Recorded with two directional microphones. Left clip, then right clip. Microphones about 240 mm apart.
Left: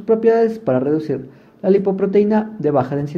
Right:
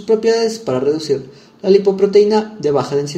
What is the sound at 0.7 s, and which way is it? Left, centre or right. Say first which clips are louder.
Speech: right 2 dB; left.